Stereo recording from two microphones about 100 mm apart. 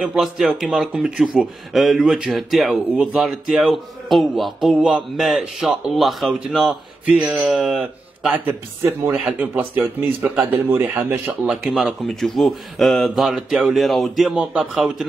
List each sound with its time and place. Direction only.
0.0 s speech: 5° right (ahead or behind)
7.1 s speech: 10° right (ahead or behind)
8.5 s speech: 25° right (ahead or behind)
11.4 s speech: 5° right (ahead or behind)